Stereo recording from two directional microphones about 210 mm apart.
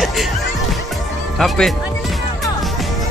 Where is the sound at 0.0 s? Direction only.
Centre (ahead or behind).